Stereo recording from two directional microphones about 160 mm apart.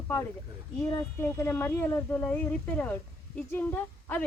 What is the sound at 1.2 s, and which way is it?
Speech, 15° left (ahead or behind).